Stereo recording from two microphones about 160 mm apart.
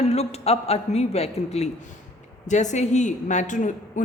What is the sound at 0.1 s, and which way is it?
A man's voice, 40° left (ahead or behind).